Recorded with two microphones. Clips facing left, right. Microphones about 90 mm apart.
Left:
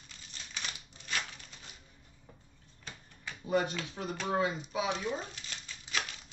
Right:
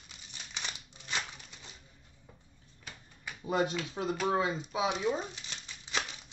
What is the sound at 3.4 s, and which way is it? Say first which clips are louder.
Finger snapping: even; 25° right (ahead or behind).